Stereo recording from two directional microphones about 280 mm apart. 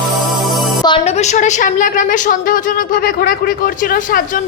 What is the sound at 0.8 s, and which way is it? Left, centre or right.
A woman's voice, centre.